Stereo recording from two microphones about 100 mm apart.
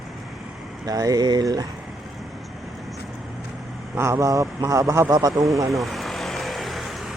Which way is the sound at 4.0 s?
30° right (ahead or behind).